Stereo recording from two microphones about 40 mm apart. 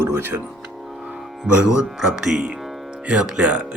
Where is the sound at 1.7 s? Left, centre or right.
Centre.